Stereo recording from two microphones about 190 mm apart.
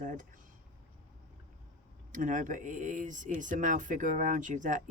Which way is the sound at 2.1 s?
45° right (ahead or behind).